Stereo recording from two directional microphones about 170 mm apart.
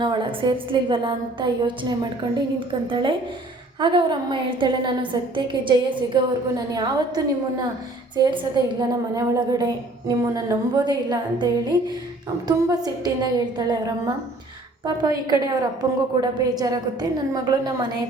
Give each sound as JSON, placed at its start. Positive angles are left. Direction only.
{"t": 0.0, "sound": "a woman's voice", "side_deg": -25}